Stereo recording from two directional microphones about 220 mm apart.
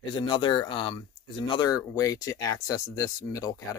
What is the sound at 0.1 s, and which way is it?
Speech, 20° left (ahead or behind).